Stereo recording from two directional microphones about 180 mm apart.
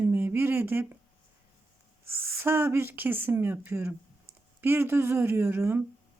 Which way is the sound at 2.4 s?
10° right (ahead or behind).